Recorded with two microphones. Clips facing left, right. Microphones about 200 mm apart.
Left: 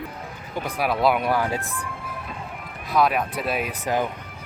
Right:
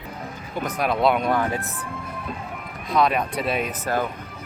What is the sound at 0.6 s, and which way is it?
Speech, 5° left (ahead or behind).